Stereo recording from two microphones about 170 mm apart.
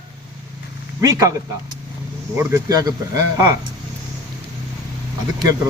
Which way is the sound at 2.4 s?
20° right (ahead or behind).